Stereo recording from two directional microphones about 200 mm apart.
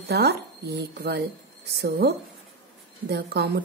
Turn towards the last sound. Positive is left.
turn(degrees=-55)  # may be behind; listen again after turning